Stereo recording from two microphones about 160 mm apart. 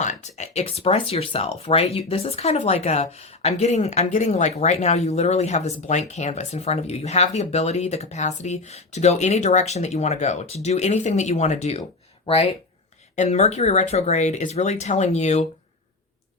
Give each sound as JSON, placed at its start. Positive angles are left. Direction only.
{"t": 0.0, "sound": "speech", "side_deg": 45}
{"t": 11.8, "sound": "a sound", "side_deg": 30}
{"t": 13.1, "sound": "speech", "side_deg": 45}